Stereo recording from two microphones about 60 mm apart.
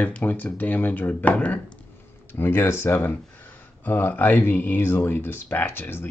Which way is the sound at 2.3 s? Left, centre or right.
Left.